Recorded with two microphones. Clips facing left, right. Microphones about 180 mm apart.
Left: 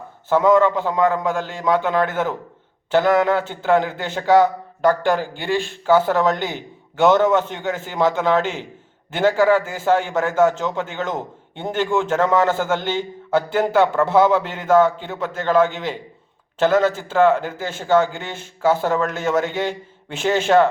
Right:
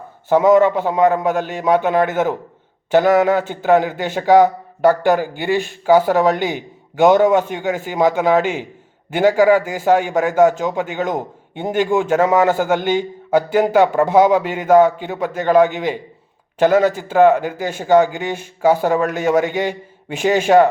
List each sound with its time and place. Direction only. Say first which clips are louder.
0.3 s a man's voice: right 3 dB; 15° right (ahead or behind)